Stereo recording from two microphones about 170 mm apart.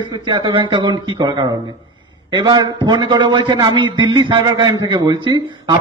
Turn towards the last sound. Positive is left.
turn(degrees=-25)  # may be behind; listen again after turning